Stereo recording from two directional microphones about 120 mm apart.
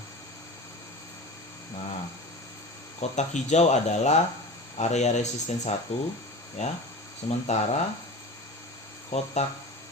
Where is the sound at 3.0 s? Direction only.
75° left (ahead or behind).